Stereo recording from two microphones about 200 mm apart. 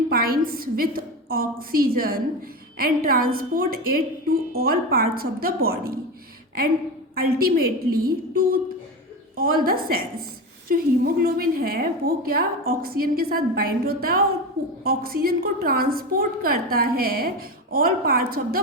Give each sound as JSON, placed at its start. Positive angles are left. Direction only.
{"t": 0.1, "sound": "a woman's voice", "side_deg": -50}
{"t": 7.2, "sound": "a woman's voice", "side_deg": -50}